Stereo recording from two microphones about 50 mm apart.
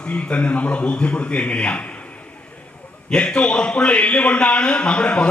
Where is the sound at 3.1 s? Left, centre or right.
Centre.